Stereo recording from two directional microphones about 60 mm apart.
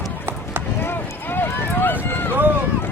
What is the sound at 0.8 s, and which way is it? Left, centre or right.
Clip-clop, left.